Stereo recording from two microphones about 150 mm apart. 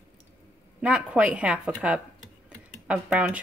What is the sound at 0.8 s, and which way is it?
A woman's voice, 10° right (ahead or behind).